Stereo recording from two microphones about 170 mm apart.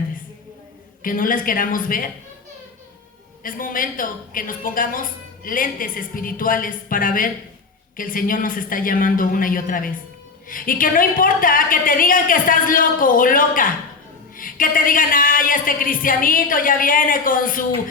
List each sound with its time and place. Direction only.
1.0 s a woman's voice: 55° left (ahead or behind)
3.4 s a woman's voice: 55° left (ahead or behind)